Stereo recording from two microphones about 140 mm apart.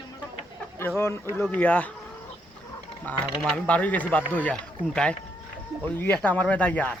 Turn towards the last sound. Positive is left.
turn(degrees=10)  # may be behind; listen again after turning